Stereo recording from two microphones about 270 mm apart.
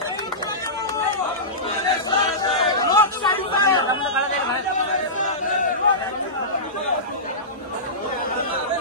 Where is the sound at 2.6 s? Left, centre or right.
Centre.